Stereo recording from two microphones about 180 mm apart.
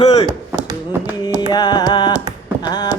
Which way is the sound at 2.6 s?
20° left (ahead or behind).